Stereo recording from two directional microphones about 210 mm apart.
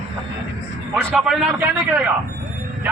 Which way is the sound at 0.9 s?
Centre (ahead or behind).